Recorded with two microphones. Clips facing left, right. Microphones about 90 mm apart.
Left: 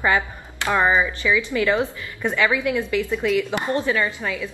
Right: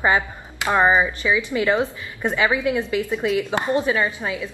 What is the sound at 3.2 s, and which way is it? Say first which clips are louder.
Speech: even; 35° right (ahead or behind).